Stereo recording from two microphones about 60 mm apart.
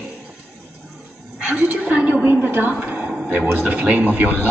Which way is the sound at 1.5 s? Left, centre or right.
Right.